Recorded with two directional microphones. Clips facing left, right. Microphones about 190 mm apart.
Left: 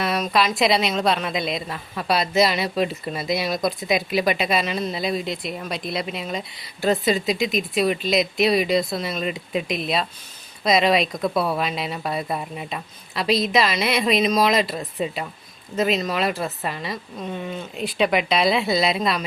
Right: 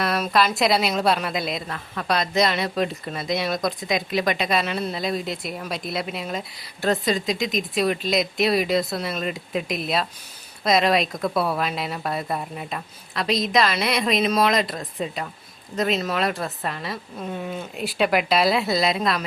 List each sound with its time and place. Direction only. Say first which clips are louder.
0.0 s speech: even; centre (ahead or behind)